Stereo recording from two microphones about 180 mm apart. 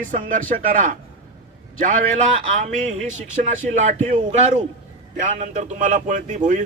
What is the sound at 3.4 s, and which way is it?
Speech, 45° right (ahead or behind).